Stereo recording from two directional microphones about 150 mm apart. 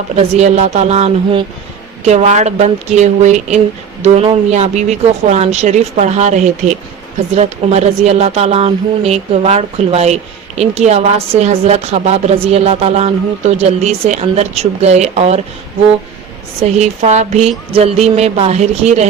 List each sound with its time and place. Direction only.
0.2 s speech: 45° right (ahead or behind)
16.7 s speech: 50° right (ahead or behind)